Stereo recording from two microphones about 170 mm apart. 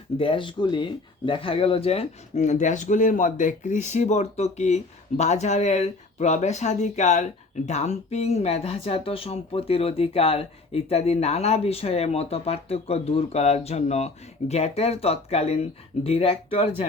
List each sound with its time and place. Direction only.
0.2 s speech: 30° left (ahead or behind)